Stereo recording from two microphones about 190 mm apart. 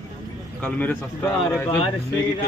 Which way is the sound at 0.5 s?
5° left (ahead or behind).